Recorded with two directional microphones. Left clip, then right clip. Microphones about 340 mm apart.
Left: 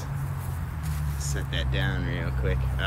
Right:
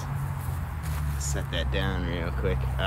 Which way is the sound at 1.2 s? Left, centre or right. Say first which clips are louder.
Right 1 dB; centre.